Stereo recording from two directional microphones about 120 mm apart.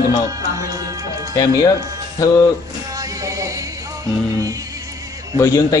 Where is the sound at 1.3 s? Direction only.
30° left (ahead or behind).